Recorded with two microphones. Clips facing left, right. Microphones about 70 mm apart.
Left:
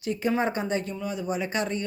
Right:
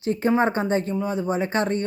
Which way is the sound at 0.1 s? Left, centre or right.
Right.